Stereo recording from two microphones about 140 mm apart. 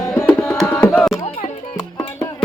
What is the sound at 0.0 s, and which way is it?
Tabla, 20° left (ahead or behind).